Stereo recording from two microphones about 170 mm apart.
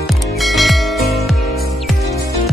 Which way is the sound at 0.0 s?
Centre (ahead or behind).